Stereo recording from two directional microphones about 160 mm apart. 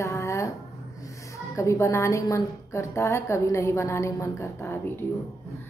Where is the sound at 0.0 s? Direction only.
20° left (ahead or behind).